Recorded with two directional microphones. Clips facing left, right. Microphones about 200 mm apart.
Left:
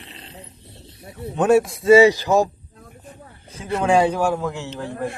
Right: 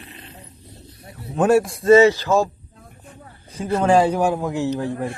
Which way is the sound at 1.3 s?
Centre (ahead or behind).